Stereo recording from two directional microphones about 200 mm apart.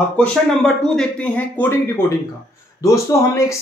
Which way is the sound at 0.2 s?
5° left (ahead or behind).